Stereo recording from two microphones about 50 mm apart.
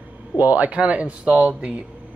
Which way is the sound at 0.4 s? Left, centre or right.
Right.